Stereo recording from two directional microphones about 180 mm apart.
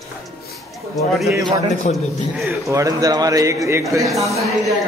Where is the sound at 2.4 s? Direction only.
15° right (ahead or behind).